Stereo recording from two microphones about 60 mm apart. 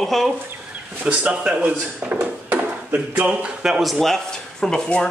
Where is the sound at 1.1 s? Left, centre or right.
Centre.